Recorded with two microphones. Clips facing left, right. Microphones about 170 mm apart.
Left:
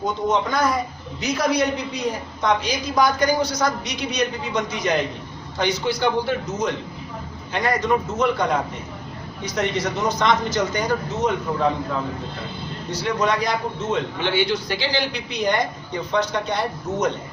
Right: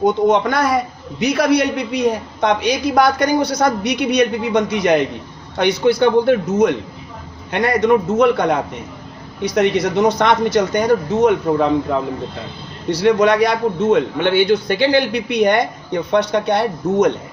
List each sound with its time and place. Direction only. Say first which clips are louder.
0.0 s a woman's voice: right 8 dB; 65° right (ahead or behind)
12.9 s a man's voice: right 9 dB; 70° right (ahead or behind)